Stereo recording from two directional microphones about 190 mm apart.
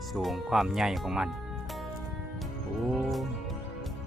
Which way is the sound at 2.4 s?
Centre (ahead or behind).